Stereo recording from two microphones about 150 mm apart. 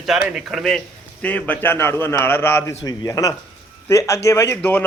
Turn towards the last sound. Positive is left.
turn(degrees=10)  # may be behind; listen again after turning